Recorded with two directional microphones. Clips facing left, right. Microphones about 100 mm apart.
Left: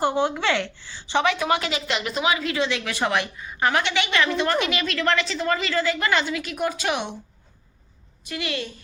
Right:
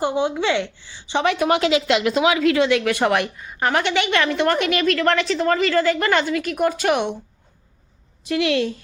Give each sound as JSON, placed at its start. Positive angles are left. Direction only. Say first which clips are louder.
{"t": 0.0, "sound": "a woman's voice", "louder": "right 2 dB", "side_deg": -15}
{"t": 1.2, "sound": "a woman's voice", "louder": "right 5 dB", "side_deg": -55}
{"t": 8.2, "sound": "a woman's voice", "louder": "right 10 dB", "side_deg": -90}